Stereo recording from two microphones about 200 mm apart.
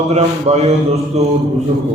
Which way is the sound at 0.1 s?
30° right (ahead or behind).